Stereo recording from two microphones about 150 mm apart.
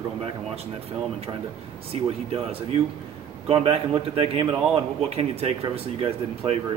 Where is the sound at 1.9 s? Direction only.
40° right (ahead or behind).